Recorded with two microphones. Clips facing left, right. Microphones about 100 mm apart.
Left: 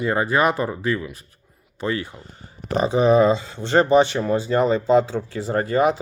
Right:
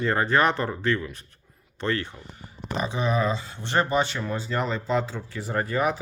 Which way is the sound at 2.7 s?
35° left (ahead or behind).